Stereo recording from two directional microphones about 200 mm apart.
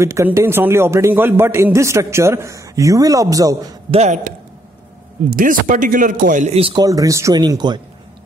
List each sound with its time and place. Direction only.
0.0 s a man's voice: 15° right (ahead or behind)
3.9 s speech: 35° right (ahead or behind)
5.3 s a man's voice: 45° right (ahead or behind); by 7.8 s 20° right (ahead or behind)